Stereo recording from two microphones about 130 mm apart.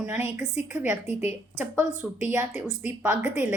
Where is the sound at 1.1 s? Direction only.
55° left (ahead or behind).